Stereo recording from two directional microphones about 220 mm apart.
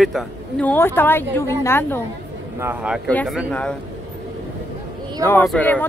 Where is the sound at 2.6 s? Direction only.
5° right (ahead or behind).